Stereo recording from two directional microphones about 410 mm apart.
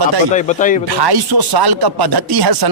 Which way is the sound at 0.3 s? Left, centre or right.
Centre.